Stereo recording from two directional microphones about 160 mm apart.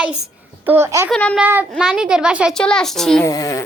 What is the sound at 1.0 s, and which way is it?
Speech, 5° left (ahead or behind).